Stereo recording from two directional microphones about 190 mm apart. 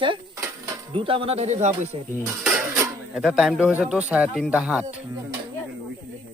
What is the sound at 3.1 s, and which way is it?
Speech, 5° right (ahead or behind).